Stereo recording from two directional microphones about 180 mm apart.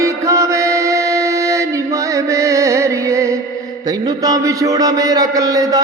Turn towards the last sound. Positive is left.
turn(degrees=-20)  # may be behind; listen again after turning